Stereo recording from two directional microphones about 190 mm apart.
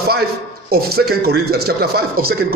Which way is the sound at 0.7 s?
55° right (ahead or behind).